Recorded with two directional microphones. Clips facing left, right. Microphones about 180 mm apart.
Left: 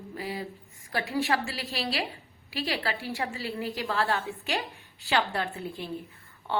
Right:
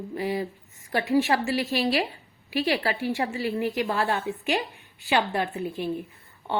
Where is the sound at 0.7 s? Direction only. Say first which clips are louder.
Right 7 dB; 20° right (ahead or behind).